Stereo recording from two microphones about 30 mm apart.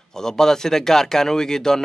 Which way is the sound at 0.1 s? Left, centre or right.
Centre.